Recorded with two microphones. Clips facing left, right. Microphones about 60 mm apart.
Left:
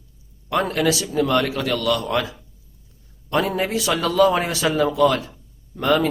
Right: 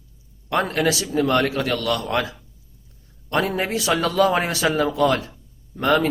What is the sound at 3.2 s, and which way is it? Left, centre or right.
A man's voice, right.